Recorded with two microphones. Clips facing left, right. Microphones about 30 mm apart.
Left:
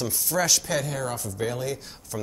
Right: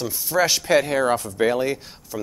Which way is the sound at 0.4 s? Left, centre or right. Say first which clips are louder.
Right 7 dB; right.